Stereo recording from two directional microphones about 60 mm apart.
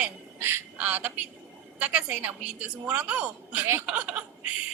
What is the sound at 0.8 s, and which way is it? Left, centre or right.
A woman's voice, right.